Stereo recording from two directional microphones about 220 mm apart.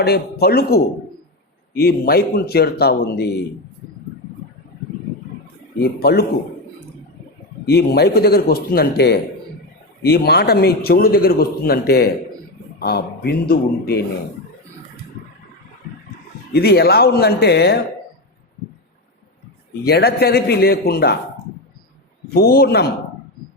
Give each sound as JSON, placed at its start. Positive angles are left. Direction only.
{"t": 0.0, "sound": "speech", "side_deg": 45}
{"t": 1.8, "sound": "speech", "side_deg": 45}
{"t": 5.8, "sound": "speech", "side_deg": 45}
{"t": 7.7, "sound": "speech", "side_deg": 45}
{"t": 16.5, "sound": "speech", "side_deg": 45}
{"t": 19.8, "sound": "speech", "side_deg": 45}
{"t": 22.3, "sound": "speech", "side_deg": 45}